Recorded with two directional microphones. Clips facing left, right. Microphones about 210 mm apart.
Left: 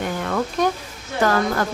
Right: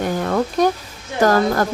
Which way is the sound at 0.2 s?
40° right (ahead or behind).